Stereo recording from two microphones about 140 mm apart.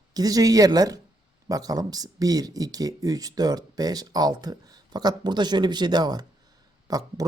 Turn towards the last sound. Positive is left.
turn(degrees=-25)  # may be behind; listen again after turning